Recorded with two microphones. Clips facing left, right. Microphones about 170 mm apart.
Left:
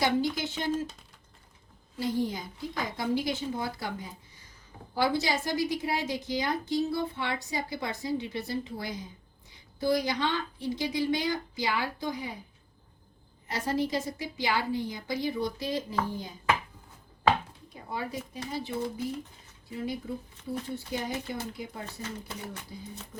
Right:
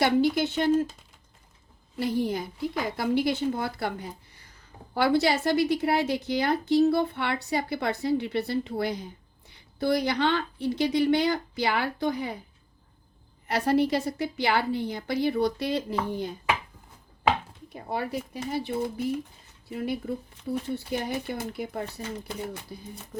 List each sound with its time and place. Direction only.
0.0 s a woman's voice: 65° right (ahead or behind)
2.0 s a woman's voice: 65° right (ahead or behind)
13.5 s a woman's voice: 65° right (ahead or behind)
17.8 s a woman's voice: 65° right (ahead or behind)